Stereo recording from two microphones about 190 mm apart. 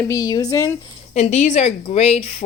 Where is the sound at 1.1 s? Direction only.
40° left (ahead or behind).